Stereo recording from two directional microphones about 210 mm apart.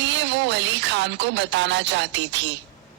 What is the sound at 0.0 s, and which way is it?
Music, 60° right (ahead or behind).